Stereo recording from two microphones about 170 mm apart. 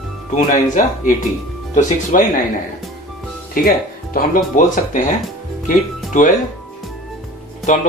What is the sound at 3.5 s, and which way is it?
Speech, 55° left (ahead or behind).